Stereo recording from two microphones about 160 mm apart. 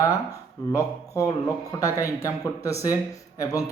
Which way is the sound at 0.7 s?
20° left (ahead or behind).